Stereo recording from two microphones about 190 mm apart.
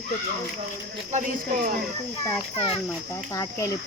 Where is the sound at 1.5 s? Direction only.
50° right (ahead or behind).